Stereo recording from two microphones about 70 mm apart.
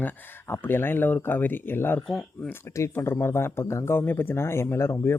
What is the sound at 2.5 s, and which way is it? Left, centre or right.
Speech, left.